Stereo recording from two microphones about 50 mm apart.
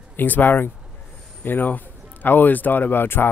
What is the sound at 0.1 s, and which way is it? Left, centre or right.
A man's voice, left.